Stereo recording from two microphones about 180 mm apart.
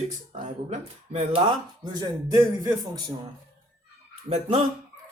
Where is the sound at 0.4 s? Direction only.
40° right (ahead or behind).